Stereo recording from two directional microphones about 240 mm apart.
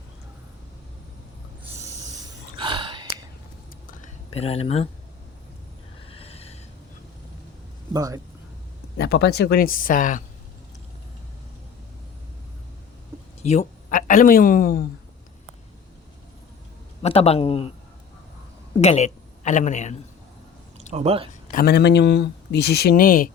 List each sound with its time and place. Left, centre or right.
2.6 s gasp: centre
4.0 s speech: left
6.1 s neigh: left
7.9 s speech: centre
9.0 s speech: left
13.4 s speech: left
17.0 s a man's voice: left
18.8 s a woman's voice: left
20.9 s speech: right
21.4 s speech: left